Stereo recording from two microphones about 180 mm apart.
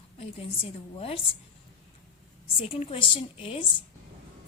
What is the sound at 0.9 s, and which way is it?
Speech, 30° left (ahead or behind).